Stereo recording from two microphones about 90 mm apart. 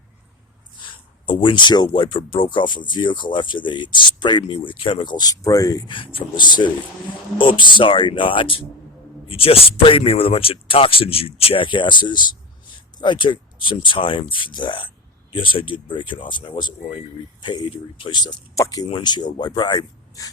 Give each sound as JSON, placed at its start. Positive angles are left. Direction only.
{"t": 0.9, "sound": "a sound", "side_deg": 65}
{"t": 1.9, "sound": "speech", "side_deg": 75}
{"t": 5.9, "sound": "speech", "side_deg": 75}
{"t": 18.5, "sound": "speech", "side_deg": 40}
{"t": 19.0, "sound": "speech", "side_deg": 50}